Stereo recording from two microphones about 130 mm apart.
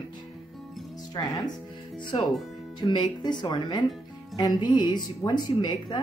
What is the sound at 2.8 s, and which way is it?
Speech, 35° left (ahead or behind).